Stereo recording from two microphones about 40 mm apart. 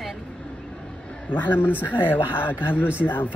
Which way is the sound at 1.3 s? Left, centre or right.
Left.